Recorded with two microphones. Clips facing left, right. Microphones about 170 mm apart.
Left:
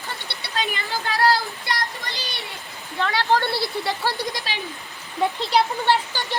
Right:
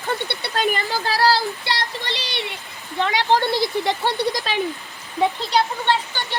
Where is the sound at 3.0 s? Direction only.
15° right (ahead or behind).